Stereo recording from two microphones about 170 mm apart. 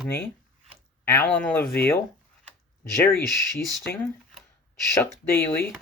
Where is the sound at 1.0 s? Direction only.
10° left (ahead or behind).